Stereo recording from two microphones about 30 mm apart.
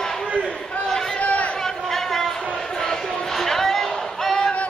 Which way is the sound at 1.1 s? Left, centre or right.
Left.